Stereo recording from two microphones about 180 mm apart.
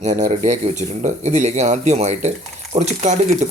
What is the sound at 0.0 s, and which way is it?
Speech, 40° right (ahead or behind).